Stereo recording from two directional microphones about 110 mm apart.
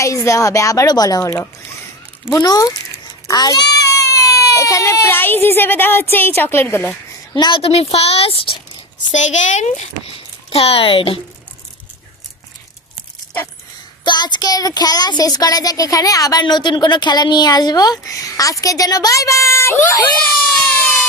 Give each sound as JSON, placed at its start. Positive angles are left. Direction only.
{"t": 0.0, "sound": "a woman's voice", "side_deg": 30}
{"t": 2.4, "sound": "a child's voice", "side_deg": 35}
{"t": 7.3, "sound": "speech", "side_deg": 40}
{"t": 7.6, "sound": "speech", "side_deg": 65}
{"t": 9.1, "sound": "speech", "side_deg": 90}
{"t": 10.5, "sound": "speech", "side_deg": 65}
{"t": 14.0, "sound": "speech", "side_deg": 45}